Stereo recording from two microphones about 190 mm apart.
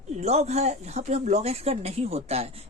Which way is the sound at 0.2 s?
35° right (ahead or behind).